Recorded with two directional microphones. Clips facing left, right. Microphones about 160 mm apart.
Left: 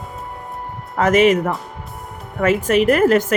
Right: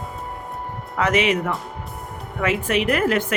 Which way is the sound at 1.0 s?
45° left (ahead or behind).